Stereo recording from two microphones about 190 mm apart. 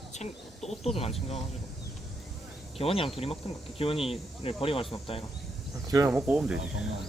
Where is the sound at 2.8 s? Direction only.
30° left (ahead or behind).